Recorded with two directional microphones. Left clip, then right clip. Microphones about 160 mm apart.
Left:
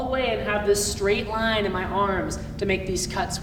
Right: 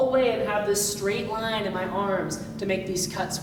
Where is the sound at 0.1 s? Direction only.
20° left (ahead or behind).